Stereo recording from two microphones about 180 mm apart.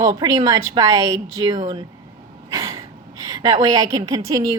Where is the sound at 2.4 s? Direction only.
20° right (ahead or behind).